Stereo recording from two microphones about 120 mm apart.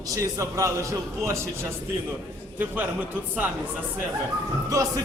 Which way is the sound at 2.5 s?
15° right (ahead or behind).